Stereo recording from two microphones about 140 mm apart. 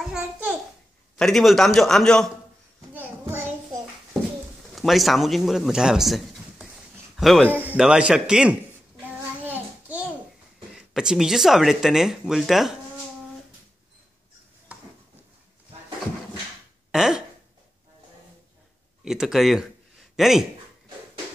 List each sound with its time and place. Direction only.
0.0 s a child's voice: 5° right (ahead or behind)
2.9 s a sound: 15° right (ahead or behind)
4.7 s speech: centre (ahead or behind)
7.4 s speech: 15° right (ahead or behind)
9.4 s child singing: 10° right (ahead or behind)
10.9 s speech: 5° right (ahead or behind)
16.9 s a sound: 5° right (ahead or behind)
19.0 s speech: 5° right (ahead or behind)